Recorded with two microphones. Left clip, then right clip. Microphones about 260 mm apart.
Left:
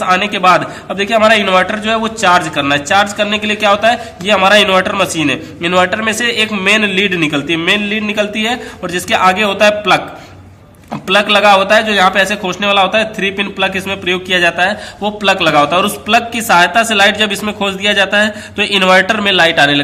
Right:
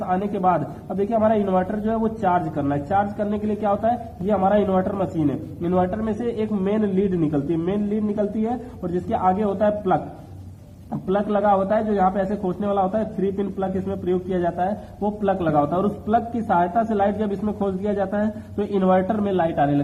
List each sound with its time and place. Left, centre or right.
0.0 s a man's voice: left